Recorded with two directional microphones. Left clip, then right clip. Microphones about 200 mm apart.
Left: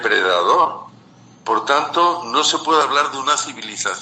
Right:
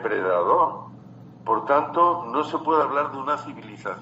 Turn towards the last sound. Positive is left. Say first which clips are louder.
# left 9 dB
turn(degrees=30)  # may be behind; listen again after turning